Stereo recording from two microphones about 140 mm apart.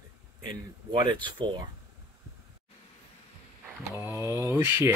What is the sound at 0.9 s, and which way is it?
Speech, 35° right (ahead or behind).